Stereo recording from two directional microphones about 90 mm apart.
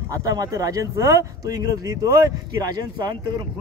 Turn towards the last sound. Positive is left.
turn(degrees=-55)  # may be behind; listen again after turning